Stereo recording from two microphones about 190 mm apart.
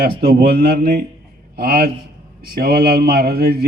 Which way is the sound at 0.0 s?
55° right (ahead or behind).